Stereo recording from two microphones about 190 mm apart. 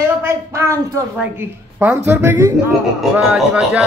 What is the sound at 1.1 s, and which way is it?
A man's voice, 10° right (ahead or behind).